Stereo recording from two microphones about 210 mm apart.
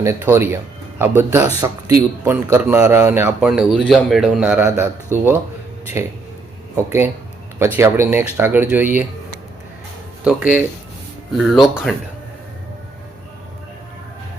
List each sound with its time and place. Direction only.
0.0 s speech: 10° right (ahead or behind)
6.0 s speech: 10° right (ahead or behind)
10.2 s speech: 5° right (ahead or behind)